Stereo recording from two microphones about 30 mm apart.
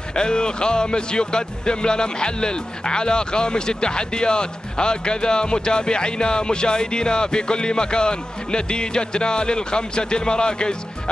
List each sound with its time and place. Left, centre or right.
0.1 s speech: left